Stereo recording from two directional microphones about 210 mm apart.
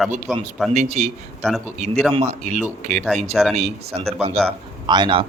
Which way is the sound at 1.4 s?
Centre (ahead or behind).